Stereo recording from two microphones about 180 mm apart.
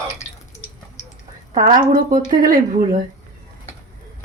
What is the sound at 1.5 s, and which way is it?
A woman's voice, 50° right (ahead or behind).